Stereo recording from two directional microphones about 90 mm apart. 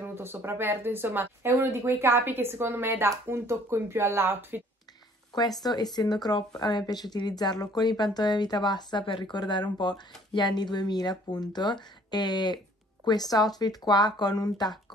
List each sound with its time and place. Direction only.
0.0 s speech: 25° right (ahead or behind)
5.6 s speech: 50° left (ahead or behind)